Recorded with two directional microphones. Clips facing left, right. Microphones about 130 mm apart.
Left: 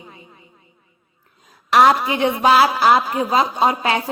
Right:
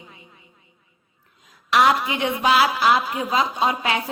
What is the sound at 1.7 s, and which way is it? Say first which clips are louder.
A woman's voice: left 4 dB; 40° left (ahead or behind).